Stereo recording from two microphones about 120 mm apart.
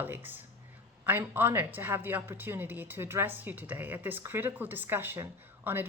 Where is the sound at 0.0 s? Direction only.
15° right (ahead or behind).